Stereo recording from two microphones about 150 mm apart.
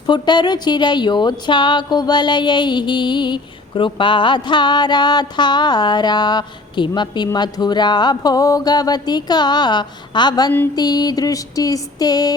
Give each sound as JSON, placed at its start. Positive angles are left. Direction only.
{"t": 0.1, "sound": "speech", "side_deg": 30}